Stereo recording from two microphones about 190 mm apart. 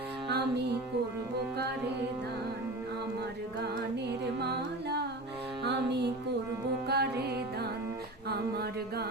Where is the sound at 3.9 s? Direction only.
60° right (ahead or behind).